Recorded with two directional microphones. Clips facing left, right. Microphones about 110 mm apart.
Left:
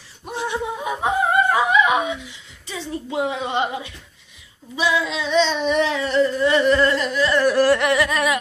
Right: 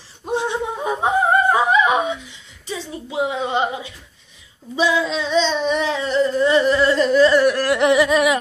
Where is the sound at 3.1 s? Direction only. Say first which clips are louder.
Right 2 dB; 15° right (ahead or behind).